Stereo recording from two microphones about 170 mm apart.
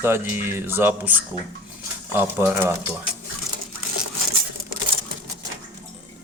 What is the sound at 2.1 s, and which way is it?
Speech, 10° right (ahead or behind).